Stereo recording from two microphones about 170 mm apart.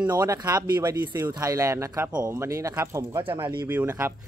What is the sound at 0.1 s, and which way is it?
Speech, 20° right (ahead or behind).